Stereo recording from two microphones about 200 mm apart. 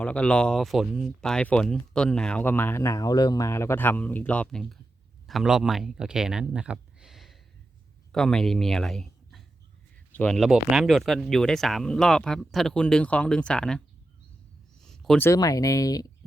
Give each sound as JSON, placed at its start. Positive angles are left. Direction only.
{"t": 0.0, "sound": "speech", "side_deg": 5}
{"t": 14.8, "sound": "a sound", "side_deg": 0}
{"t": 15.3, "sound": "speech", "side_deg": 15}